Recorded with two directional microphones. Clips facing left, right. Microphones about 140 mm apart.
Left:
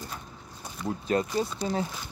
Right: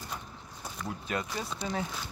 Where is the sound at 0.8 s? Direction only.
30° left (ahead or behind).